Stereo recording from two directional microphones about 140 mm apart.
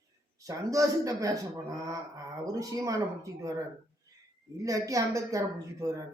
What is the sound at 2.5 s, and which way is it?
A woman's voice, 25° right (ahead or behind).